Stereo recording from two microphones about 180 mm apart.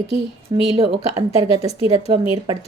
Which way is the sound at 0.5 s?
25° right (ahead or behind).